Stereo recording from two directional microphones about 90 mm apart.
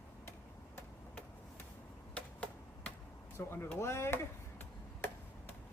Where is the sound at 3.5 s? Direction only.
25° left (ahead or behind).